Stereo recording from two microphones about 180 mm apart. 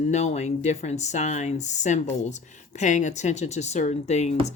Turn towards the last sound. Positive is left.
turn(degrees=40)  # may be behind; listen again after turning